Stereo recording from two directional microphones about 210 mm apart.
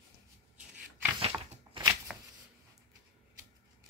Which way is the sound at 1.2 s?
25° right (ahead or behind).